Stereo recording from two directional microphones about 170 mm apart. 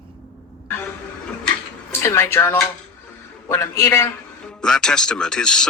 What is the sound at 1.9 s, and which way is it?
A man's voice, 15° left (ahead or behind).